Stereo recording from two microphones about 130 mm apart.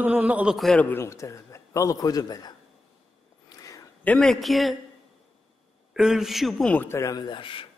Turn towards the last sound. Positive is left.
turn(degrees=40)  # may be behind; listen again after turning